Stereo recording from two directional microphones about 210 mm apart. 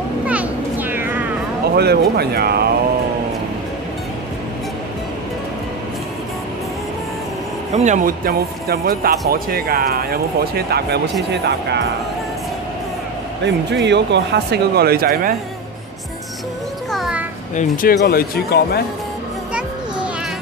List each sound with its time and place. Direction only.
0.3 s a sound: 10° right (ahead or behind)
1.8 s speech: 50° right (ahead or behind)
7.7 s speech: 35° right (ahead or behind)
13.4 s speech: 55° right (ahead or behind)
16.9 s music: centre (ahead or behind)
17.6 s speech: 45° left (ahead or behind)